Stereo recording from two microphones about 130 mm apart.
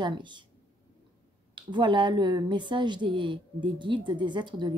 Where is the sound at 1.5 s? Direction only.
35° right (ahead or behind).